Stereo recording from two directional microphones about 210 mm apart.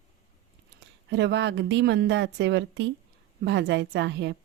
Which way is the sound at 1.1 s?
55° right (ahead or behind).